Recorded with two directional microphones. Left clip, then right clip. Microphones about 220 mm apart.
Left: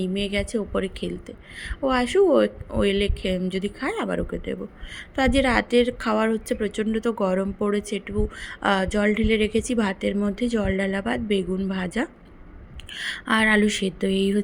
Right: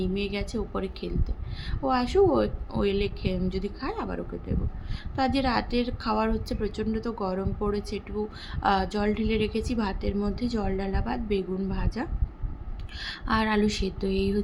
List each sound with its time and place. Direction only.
0.0 s a woman's voice: 10° left (ahead or behind)
12.9 s a woman's voice: 15° left (ahead or behind)